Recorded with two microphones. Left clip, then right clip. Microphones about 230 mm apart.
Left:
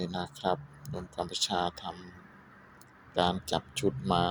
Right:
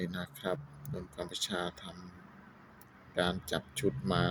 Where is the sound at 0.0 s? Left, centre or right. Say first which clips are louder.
Left 6 dB; centre.